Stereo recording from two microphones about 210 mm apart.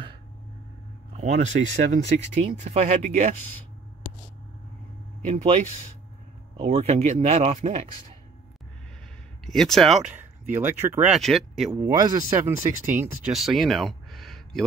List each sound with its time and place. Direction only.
1.1 s speech: 35° right (ahead or behind)
6.6 s speech: 30° right (ahead or behind)
9.5 s speech: centre (ahead or behind)
10.5 s speech: 10° right (ahead or behind)
11.1 s speech: centre (ahead or behind)
11.7 s speech: 20° right (ahead or behind)
13.3 s a sound: centre (ahead or behind)